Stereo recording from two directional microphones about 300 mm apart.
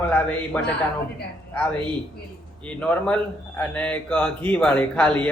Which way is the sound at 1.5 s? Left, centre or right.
Centre.